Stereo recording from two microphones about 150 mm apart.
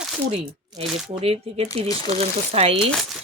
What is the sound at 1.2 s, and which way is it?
Speech, 40° right (ahead or behind).